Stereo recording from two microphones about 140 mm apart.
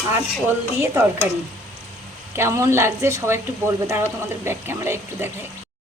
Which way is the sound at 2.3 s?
20° right (ahead or behind).